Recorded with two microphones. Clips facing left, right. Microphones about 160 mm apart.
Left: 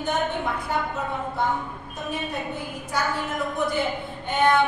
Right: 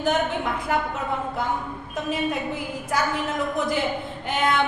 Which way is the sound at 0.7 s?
90° right.